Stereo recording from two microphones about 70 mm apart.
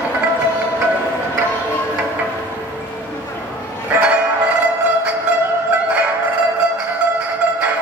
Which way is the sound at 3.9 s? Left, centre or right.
Right.